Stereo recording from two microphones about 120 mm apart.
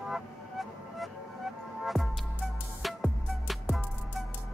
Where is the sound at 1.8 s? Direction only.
Centre (ahead or behind).